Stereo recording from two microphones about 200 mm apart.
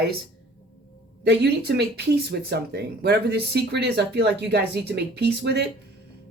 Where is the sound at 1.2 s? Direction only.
55° right (ahead or behind).